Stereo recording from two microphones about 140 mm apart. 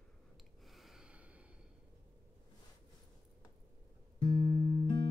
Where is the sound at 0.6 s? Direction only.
Centre (ahead or behind).